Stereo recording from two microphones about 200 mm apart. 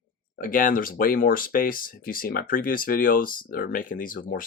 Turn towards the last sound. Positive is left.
turn(degrees=45)  # may be behind; listen again after turning